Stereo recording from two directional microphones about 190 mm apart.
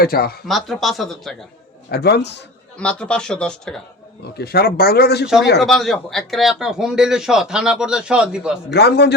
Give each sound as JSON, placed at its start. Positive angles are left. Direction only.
{"t": 0.0, "sound": "speech", "side_deg": 50}
{"t": 0.4, "sound": "a man's voice", "side_deg": 0}
{"t": 1.9, "sound": "speech", "side_deg": 60}
{"t": 2.7, "sound": "a man's voice", "side_deg": 5}
{"t": 4.2, "sound": "speech", "side_deg": 55}
{"t": 5.5, "sound": "a man's voice", "side_deg": 0}
{"t": 8.7, "sound": "speech", "side_deg": 60}